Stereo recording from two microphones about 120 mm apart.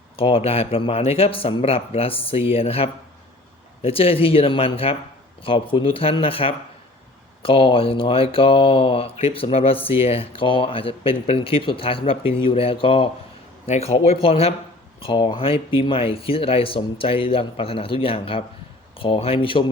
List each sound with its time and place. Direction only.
0.2 s speech: 50° left (ahead or behind)
13.7 s speech: 65° left (ahead or behind); by 19.6 s 45° left (ahead or behind)